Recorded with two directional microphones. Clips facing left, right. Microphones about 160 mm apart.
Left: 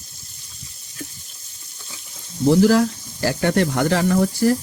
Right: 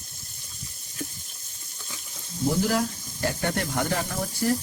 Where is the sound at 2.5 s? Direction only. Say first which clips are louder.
Left 10 dB; 90° left.